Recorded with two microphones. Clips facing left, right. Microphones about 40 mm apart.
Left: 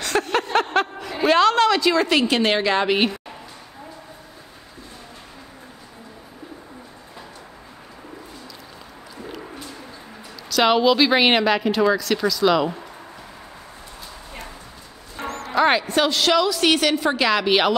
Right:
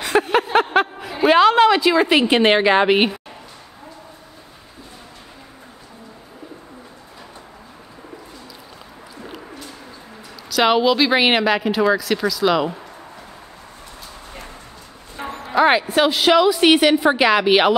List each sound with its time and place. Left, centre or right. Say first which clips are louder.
0.0 s a sound: right 4 dB; centre
10.5 s speech: right 1 dB; centre
15.1 s a woman's voice: right 3 dB; centre